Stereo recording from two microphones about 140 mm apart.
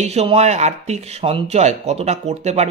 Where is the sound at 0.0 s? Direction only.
50° right (ahead or behind).